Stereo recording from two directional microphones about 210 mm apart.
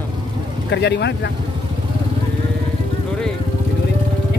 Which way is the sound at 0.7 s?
55° left (ahead or behind).